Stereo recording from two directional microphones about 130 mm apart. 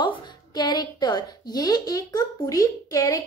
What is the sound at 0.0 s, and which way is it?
A woman's voice, 35° left (ahead or behind).